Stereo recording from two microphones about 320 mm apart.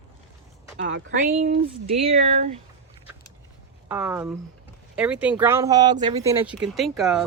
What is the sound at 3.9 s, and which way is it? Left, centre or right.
Speech, centre.